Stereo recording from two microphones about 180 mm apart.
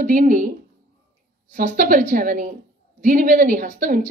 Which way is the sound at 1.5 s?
50° right (ahead or behind).